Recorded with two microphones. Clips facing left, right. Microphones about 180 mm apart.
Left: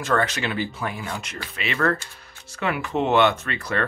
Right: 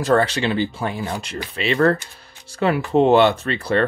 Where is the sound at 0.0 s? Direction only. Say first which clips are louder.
Right 6 dB; 35° right (ahead or behind).